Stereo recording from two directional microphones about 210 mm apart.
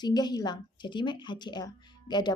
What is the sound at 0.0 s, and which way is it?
A woman's voice, 20° left (ahead or behind).